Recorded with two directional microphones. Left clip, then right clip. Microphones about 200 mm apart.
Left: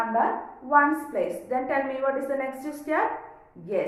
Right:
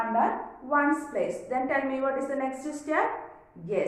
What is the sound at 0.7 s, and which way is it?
A woman's voice, 15° left (ahead or behind).